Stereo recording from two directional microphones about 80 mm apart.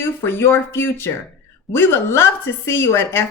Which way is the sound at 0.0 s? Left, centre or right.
Left.